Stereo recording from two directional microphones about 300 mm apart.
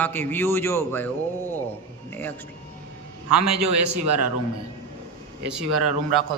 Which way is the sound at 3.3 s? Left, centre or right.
Right.